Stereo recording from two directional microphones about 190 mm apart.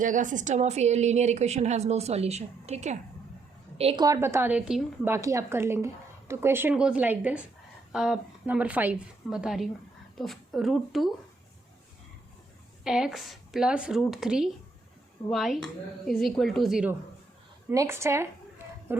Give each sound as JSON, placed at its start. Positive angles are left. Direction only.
{"t": 0.0, "sound": "a woman's voice", "side_deg": -40}
{"t": 4.0, "sound": "a woman's voice", "side_deg": -15}
{"t": 12.8, "sound": "a woman's voice", "side_deg": -5}
{"t": 17.7, "sound": "a woman's voice", "side_deg": -15}
{"t": 18.9, "sound": "a sound", "side_deg": -10}